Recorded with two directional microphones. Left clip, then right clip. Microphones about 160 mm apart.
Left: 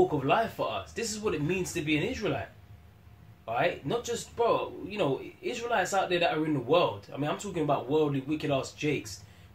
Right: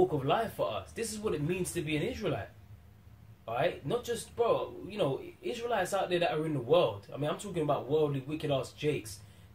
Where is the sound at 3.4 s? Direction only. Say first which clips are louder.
Left 3 dB; 10° right (ahead or behind).